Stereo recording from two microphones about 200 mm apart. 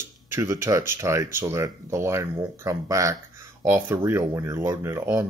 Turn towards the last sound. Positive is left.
turn(degrees=-10)  # may be behind; listen again after turning